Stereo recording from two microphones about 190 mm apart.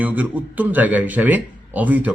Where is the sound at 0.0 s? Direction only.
10° right (ahead or behind).